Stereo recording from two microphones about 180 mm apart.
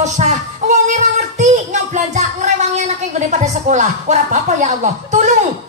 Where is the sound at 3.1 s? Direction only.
40° right (ahead or behind).